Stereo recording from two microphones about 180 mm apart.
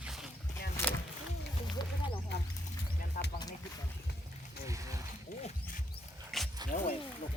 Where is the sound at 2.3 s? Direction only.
70° left (ahead or behind).